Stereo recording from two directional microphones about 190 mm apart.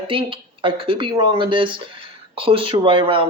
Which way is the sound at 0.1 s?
25° right (ahead or behind).